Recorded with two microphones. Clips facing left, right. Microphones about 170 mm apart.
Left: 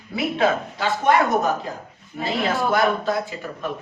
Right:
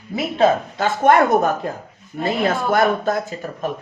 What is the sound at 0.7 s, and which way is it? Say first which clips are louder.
Speech: right 4 dB; 50° right (ahead or behind).